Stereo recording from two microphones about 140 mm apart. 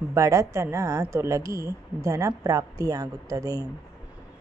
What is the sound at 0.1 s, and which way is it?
Speech, 20° right (ahead or behind).